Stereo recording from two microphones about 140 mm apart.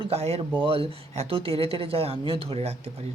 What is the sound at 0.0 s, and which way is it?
Speech, 45° right (ahead or behind).